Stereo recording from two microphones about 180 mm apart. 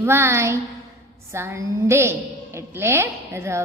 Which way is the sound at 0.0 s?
15° right (ahead or behind).